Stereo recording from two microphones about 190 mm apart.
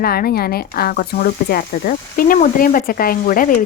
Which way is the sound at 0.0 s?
55° left (ahead or behind).